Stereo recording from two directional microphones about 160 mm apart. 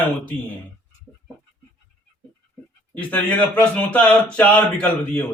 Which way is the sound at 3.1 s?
10° left (ahead or behind).